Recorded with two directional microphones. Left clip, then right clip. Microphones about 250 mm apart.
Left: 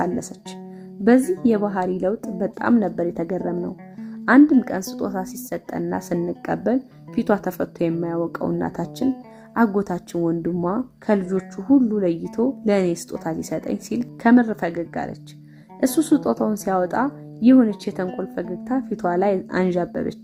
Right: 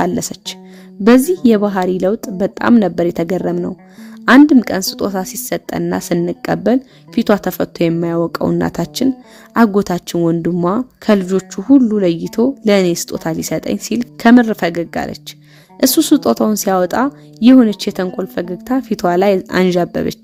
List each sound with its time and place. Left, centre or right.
0.2 s speech: right
3.3 s speech: right